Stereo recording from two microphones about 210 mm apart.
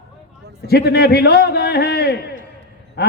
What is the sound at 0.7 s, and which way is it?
A man's voice, 50° left (ahead or behind).